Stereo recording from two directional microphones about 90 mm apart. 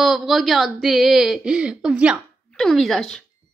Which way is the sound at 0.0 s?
5° right (ahead or behind).